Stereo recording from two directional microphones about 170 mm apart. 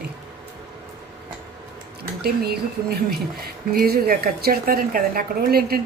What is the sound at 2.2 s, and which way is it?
A woman's voice, 65° right (ahead or behind).